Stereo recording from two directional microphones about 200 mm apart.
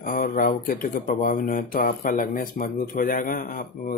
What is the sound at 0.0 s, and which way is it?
Speech, 45° left (ahead or behind).